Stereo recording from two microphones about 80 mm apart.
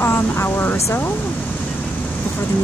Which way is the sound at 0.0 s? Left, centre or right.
Left.